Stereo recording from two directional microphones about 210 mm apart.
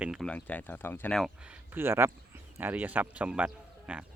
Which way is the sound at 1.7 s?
10° right (ahead or behind).